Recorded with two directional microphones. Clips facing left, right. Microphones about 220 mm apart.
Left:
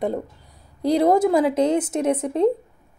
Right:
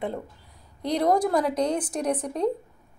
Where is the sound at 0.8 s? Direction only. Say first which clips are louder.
Left 6 dB; 25° left (ahead or behind).